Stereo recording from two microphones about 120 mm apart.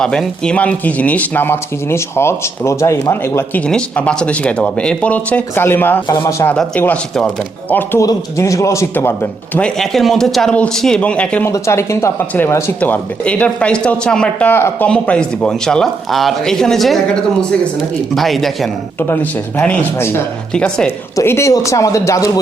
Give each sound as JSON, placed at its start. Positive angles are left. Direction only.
{"t": 0.0, "sound": "speech", "side_deg": 5}
{"t": 3.7, "sound": "speech", "side_deg": 10}
{"t": 6.1, "sound": "speech", "side_deg": 30}
{"t": 6.6, "sound": "speech", "side_deg": 10}
{"t": 8.0, "sound": "speech", "side_deg": 25}
{"t": 9.6, "sound": "a man's voice", "side_deg": 5}
{"t": 11.5, "sound": "speech", "side_deg": 25}
{"t": 12.8, "sound": "a man's voice", "side_deg": 10}
{"t": 18.1, "sound": "a man's voice", "side_deg": 0}
{"t": 19.0, "sound": "speech", "side_deg": 15}
{"t": 21.2, "sound": "speech", "side_deg": 25}